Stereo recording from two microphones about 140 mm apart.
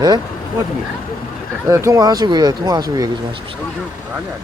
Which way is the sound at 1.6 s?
20° right (ahead or behind).